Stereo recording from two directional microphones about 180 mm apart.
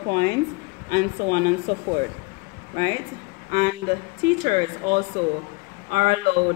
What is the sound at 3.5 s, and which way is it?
A man's voice, 50° right (ahead or behind).